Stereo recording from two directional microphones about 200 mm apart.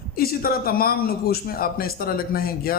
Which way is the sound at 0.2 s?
50° left (ahead or behind).